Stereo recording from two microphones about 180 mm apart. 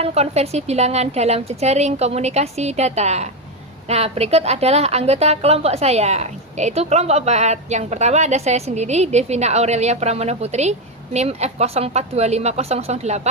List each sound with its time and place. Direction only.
0.0 s a woman's voice: 35° right (ahead or behind)